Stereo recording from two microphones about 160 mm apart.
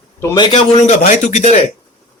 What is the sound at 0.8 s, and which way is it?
Speech, 50° left (ahead or behind).